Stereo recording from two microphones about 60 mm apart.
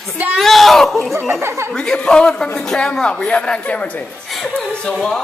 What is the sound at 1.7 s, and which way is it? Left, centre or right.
A man's voice, centre.